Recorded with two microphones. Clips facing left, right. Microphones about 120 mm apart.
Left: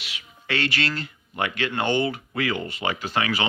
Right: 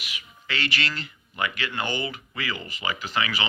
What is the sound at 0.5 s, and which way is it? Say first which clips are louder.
Speech: left 4 dB; 55° left (ahead or behind).